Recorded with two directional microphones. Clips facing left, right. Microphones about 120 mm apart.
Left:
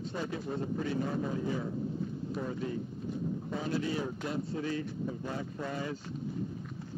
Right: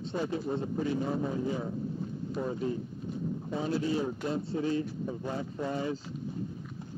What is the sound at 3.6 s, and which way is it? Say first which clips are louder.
A man's voice: right 4 dB; 30° right (ahead or behind).